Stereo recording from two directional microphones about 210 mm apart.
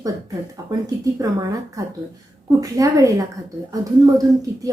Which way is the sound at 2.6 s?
15° right (ahead or behind).